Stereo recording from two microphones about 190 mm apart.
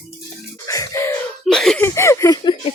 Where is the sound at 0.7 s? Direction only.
15° left (ahead or behind).